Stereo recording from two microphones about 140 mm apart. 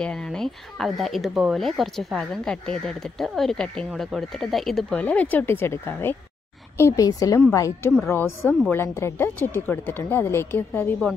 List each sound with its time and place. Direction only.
0.0 s a woman's voice: 5° left (ahead or behind)